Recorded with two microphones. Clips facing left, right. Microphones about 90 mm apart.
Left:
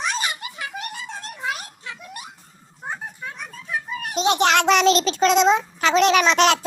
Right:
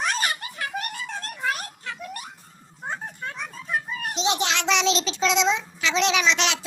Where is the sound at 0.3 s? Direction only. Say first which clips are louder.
Even; 20° left (ahead or behind).